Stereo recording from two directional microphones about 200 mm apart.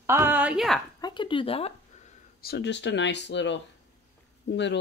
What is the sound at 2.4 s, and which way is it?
Speech, 55° left (ahead or behind).